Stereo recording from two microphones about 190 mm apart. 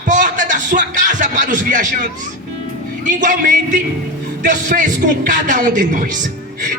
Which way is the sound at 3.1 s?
40° right (ahead or behind).